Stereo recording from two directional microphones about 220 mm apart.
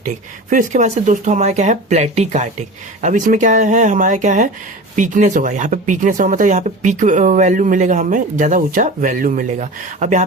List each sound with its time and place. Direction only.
0.0 s speech: 35° right (ahead or behind)